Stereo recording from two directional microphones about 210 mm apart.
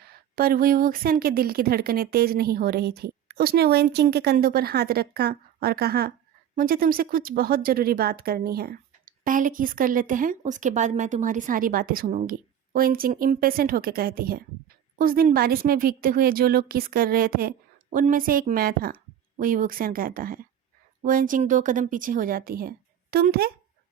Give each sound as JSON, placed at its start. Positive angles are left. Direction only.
{"t": 0.1, "sound": "speech", "side_deg": -45}